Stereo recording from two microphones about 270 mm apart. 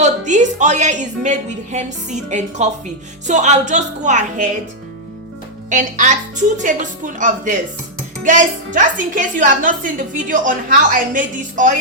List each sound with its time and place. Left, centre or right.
0.0 s a woman's voice: right
5.6 s a woman's voice: right